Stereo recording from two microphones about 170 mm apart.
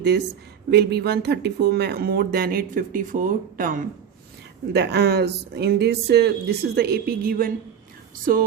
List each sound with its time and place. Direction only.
0.7 s speech: 75° right (ahead or behind); by 3.8 s 50° right (ahead or behind)
4.7 s speech: 75° right (ahead or behind); by 8.4 s 60° right (ahead or behind)